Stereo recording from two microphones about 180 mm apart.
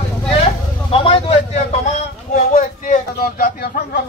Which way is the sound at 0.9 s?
30° left (ahead or behind).